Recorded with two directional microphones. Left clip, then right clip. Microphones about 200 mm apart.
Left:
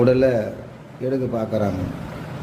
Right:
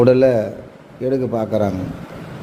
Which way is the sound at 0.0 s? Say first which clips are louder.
Right 4 dB; 40° right (ahead or behind).